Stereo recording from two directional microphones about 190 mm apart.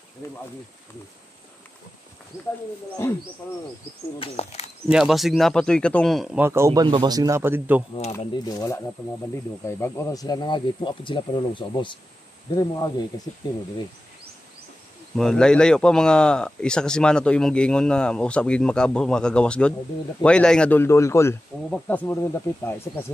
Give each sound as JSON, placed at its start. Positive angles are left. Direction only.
{"t": 3.4, "sound": "speech", "side_deg": 10}
{"t": 4.2, "sound": "speech", "side_deg": 35}
{"t": 4.9, "sound": "speech", "side_deg": 0}
{"t": 8.5, "sound": "speech", "side_deg": 20}
{"t": 15.1, "sound": "speech", "side_deg": 5}